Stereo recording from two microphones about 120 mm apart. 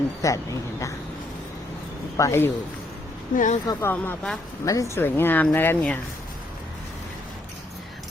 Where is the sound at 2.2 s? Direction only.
20° left (ahead or behind).